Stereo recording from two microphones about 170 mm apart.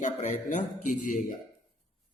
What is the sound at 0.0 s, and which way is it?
A man's voice, 45° left (ahead or behind).